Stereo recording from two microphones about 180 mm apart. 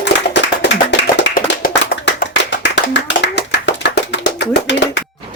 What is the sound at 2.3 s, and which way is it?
Clapping, 80° left.